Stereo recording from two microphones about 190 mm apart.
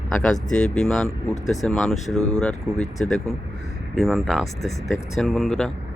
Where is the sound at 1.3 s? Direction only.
40° left (ahead or behind).